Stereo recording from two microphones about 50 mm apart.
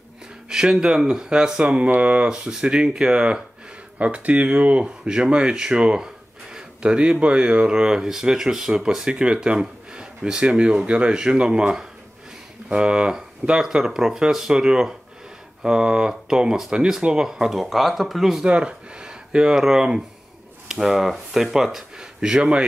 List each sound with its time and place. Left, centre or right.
0.5 s speech: centre
18.4 s speech: centre